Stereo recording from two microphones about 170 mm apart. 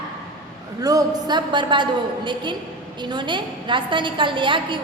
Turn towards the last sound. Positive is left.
turn(degrees=-30)  # may be behind; listen again after turning